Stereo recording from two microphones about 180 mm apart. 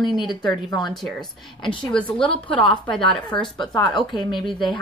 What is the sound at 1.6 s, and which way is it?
Speech, 25° left (ahead or behind).